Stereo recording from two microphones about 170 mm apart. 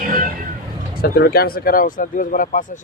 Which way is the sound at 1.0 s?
65° left (ahead or behind).